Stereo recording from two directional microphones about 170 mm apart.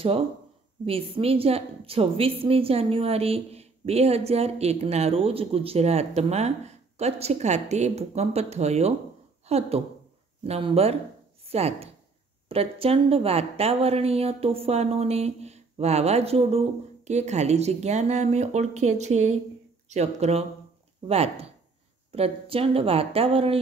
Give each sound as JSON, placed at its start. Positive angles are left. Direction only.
{"t": 0.8, "sound": "a woman's voice", "side_deg": -35}